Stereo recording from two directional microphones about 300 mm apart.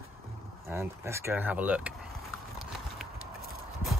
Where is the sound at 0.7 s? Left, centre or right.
Centre.